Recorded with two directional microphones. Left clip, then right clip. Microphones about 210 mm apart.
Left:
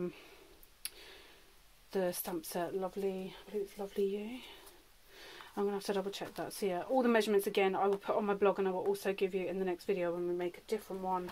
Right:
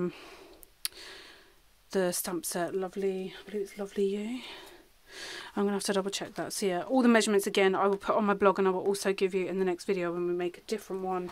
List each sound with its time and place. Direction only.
0.0 s speech: 45° right (ahead or behind)
0.8 s tick: 40° right (ahead or behind)
1.9 s speech: 40° right (ahead or behind)